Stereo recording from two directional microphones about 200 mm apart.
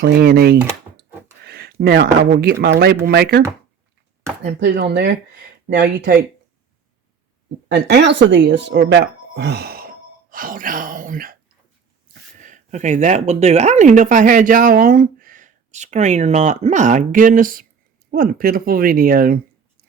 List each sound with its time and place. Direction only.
0.0 s speech: 50° right (ahead or behind)
4.6 s speech: 60° right (ahead or behind)
7.7 s speech: 60° right (ahead or behind); by 11.3 s 45° right (ahead or behind)
12.4 s speech: 40° right (ahead or behind)